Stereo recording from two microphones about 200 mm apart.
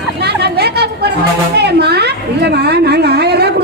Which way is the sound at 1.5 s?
55° right (ahead or behind).